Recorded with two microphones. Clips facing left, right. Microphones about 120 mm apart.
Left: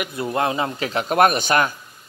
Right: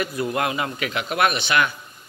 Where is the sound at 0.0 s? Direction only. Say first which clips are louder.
Left 1 dB; 25° left (ahead or behind).